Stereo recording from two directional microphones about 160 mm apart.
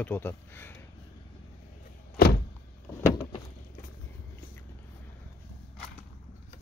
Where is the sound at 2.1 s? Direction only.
85° left.